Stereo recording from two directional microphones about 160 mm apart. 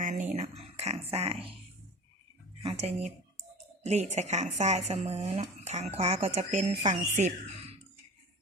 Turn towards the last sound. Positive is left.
turn(degrees=-45)  # may be behind; listen again after turning